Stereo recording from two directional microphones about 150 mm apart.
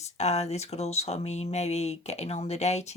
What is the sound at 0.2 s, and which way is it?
Speech, 45° left (ahead or behind).